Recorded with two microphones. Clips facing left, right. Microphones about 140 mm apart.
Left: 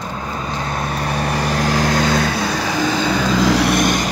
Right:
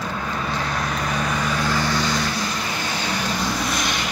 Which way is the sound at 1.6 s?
80° left.